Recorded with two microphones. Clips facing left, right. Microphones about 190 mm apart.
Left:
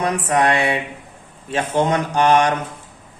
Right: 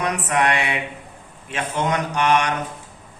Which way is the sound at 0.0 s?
30° left (ahead or behind).